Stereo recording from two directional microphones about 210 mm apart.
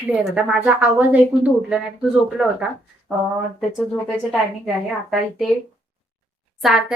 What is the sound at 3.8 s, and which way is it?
A woman's voice, centre (ahead or behind).